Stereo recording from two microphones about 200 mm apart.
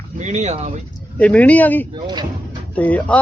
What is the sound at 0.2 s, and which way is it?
Speech, 35° right (ahead or behind).